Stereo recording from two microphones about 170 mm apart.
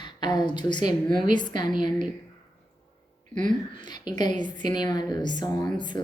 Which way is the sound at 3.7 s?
25° left (ahead or behind).